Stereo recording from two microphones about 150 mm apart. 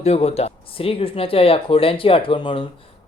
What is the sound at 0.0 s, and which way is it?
Mantra, 45° left (ahead or behind).